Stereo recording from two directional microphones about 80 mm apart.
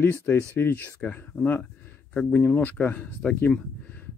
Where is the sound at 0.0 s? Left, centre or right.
Left.